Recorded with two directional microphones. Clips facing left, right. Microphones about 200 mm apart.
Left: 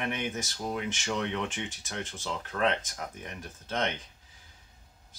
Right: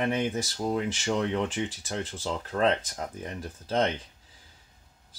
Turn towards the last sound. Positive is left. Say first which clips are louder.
# right 5 dB
turn(degrees=-35)  # may be behind; listen again after turning